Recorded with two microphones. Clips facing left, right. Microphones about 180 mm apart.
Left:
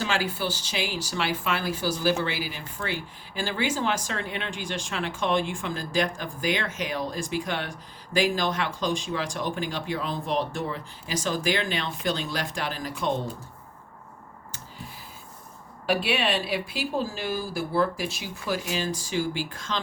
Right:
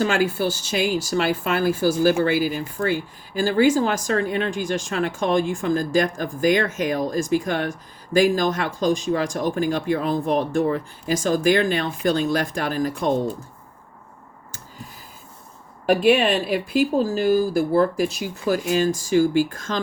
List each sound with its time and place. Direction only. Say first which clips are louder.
0.0 s speech: right 7 dB; 50° right (ahead or behind)
15.9 s speech: right 8 dB; 45° right (ahead or behind)